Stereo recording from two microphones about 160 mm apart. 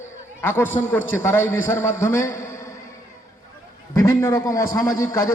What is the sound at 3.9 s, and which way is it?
A man's voice, 15° left (ahead or behind).